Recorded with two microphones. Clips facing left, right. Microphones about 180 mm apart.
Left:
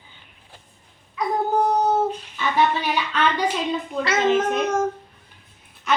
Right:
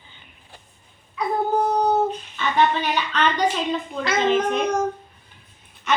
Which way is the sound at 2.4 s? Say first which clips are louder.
Right 1 dB; 10° left (ahead or behind).